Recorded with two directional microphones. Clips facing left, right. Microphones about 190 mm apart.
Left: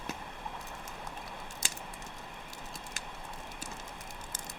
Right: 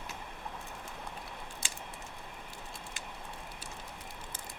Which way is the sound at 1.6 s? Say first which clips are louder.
Left 2 dB; 40° left (ahead or behind).